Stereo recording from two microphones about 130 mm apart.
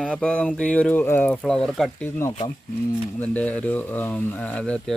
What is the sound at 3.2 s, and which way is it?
Speech, 10° left (ahead or behind).